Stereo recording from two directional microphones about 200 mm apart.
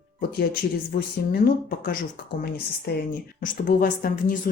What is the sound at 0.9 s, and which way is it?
Speech, 50° left (ahead or behind).